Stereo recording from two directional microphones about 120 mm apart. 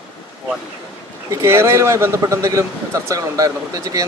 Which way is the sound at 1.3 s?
20° right (ahead or behind).